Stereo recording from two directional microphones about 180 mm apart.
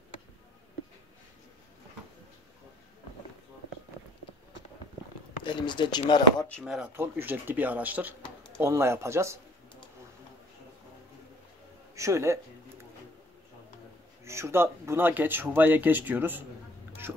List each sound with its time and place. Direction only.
5.4 s speech: 25° left (ahead or behind)
6.6 s speech: 5° right (ahead or behind)
11.9 s a man's voice: 15° right (ahead or behind)
14.2 s speech: 15° right (ahead or behind)